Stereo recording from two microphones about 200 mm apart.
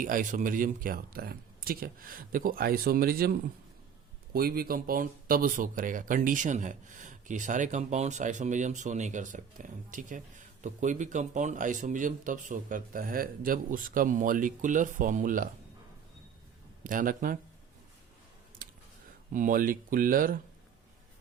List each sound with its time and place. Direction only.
0.0 s speech: 40° right (ahead or behind)
16.8 s speech: 45° right (ahead or behind)
18.6 s a sound: 45° right (ahead or behind)
19.3 s speech: 45° right (ahead or behind)